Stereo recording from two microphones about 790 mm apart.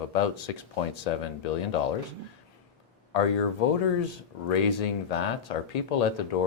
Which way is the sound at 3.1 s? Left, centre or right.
Left.